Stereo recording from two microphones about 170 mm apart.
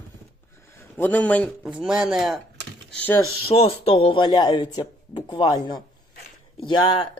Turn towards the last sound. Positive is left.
turn(degrees=30)  # may be behind; listen again after turning